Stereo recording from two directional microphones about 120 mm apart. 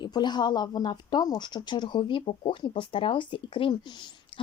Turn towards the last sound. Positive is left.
turn(degrees=45)  # may be behind; listen again after turning